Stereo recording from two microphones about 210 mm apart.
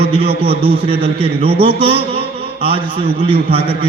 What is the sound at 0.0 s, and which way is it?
A man's voice, 25° right (ahead or behind).